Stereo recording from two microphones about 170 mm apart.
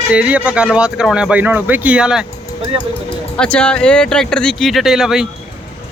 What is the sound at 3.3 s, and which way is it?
Speech, 5° left (ahead or behind).